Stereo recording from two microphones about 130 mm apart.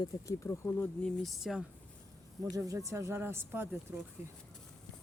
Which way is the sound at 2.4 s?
25° right (ahead or behind).